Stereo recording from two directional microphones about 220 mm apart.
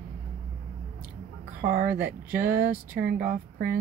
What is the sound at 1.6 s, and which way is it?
Speech, 45° right (ahead or behind).